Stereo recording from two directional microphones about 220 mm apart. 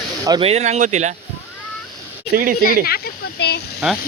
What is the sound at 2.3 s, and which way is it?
Speech, 40° right (ahead or behind).